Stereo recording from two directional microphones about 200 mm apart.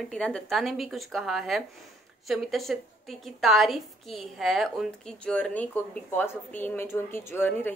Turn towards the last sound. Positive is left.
turn(degrees=10)  # may be behind; listen again after turning